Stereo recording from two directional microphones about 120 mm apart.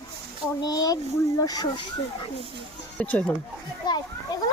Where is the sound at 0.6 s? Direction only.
30° left (ahead or behind).